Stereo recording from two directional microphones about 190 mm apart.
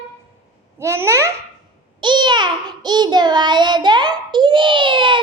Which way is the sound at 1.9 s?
25° right (ahead or behind).